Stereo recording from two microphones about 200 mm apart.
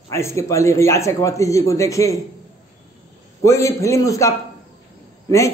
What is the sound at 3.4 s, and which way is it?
A man's voice, 15° left (ahead or behind).